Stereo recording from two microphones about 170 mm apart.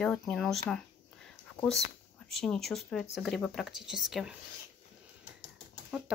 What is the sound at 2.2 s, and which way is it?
Speech, centre (ahead or behind).